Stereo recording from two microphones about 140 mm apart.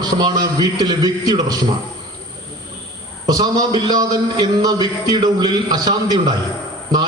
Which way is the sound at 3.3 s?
25° right (ahead or behind).